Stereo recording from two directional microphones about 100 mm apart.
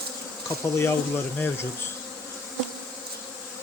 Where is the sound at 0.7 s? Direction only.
25° left (ahead or behind).